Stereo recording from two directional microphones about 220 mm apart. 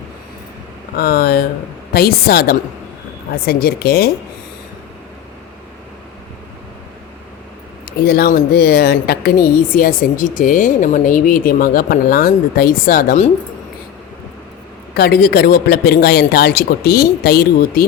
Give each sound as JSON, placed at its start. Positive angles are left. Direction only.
{"t": 0.9, "sound": "a man's voice", "side_deg": 45}
{"t": 8.0, "sound": "speech", "side_deg": 45}
{"t": 14.9, "sound": "a man's voice", "side_deg": 45}